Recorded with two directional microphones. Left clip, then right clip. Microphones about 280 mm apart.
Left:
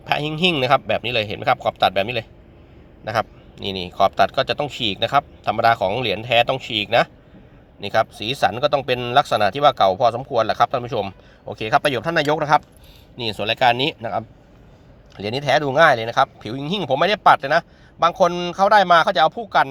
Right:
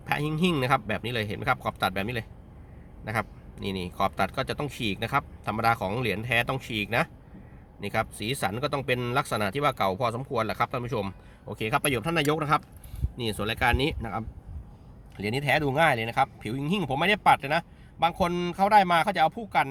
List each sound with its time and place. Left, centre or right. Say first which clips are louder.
0.0 s a man's voice: left 8 dB; centre
3.7 s speech: left 7 dB; centre
3.9 s speech: left 11 dB; centre